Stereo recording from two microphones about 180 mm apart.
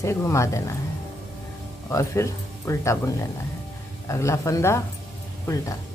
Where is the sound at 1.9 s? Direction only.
15° left (ahead or behind).